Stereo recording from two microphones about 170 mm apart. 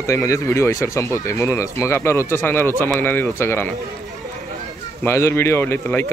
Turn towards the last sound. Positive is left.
turn(degrees=15)  # may be behind; listen again after turning